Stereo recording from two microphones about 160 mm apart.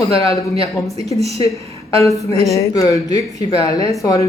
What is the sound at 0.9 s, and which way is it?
Speech, 40° right (ahead or behind).